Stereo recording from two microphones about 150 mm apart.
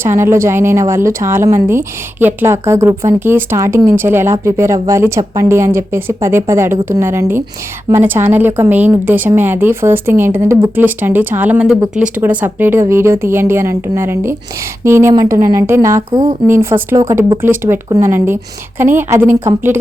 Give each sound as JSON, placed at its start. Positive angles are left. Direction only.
{"t": 0.0, "sound": "a woman's voice", "side_deg": -15}